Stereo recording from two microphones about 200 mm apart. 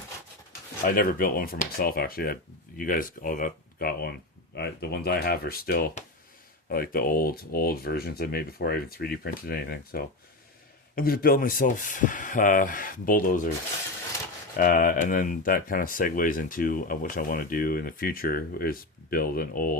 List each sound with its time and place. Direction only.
0.9 s speech: 45° left (ahead or behind)
14.6 s speech: 40° left (ahead or behind)